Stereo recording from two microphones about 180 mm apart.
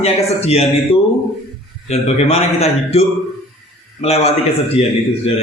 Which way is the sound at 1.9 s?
35° left (ahead or behind).